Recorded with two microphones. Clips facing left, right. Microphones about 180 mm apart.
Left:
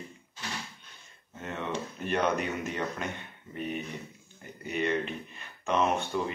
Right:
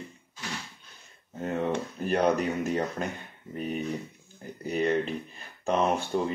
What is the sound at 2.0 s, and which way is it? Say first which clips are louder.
Speech: right 3 dB; 40° right (ahead or behind).